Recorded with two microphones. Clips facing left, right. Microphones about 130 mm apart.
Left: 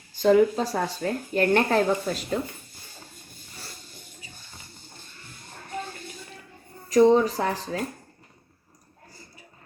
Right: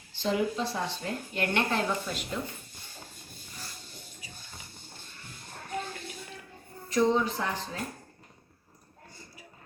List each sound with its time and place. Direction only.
0.2 s a woman's voice: 45° left (ahead or behind)
6.9 s a woman's voice: 40° left (ahead or behind)